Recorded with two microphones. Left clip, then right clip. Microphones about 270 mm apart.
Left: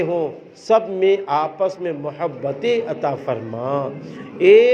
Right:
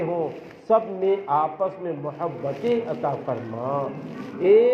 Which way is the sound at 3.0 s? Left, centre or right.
Left.